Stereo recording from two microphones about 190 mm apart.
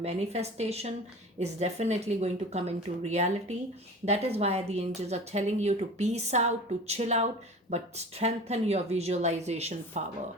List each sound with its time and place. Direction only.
0.0 s a woman's voice: 35° right (ahead or behind)